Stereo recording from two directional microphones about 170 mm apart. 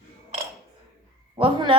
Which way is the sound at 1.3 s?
30° right (ahead or behind).